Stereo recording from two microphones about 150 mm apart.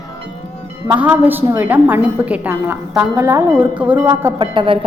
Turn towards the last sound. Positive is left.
turn(degrees=-35)  # may be behind; listen again after turning